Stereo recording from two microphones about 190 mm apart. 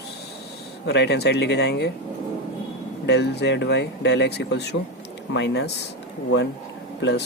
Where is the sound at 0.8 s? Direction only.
65° left (ahead or behind).